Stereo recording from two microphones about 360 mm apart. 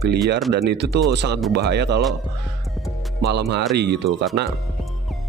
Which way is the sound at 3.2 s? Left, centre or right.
Right.